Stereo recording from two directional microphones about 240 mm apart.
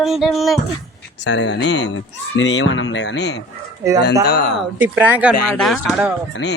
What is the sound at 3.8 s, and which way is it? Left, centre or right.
Speech, centre.